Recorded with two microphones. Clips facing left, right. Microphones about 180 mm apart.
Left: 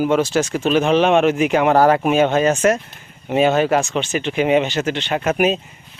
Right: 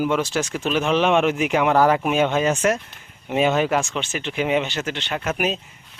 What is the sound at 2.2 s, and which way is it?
Speech, 55° left (ahead or behind).